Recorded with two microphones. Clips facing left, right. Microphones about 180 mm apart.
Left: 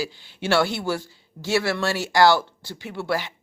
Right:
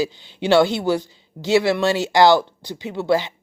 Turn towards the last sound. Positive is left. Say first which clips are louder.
# right 7 dB
turn(degrees=-20)  # may be behind; listen again after turning